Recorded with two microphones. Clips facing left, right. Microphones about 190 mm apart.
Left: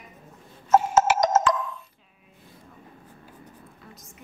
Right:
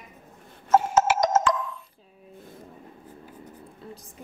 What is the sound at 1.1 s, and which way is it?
Music, 55° left (ahead or behind).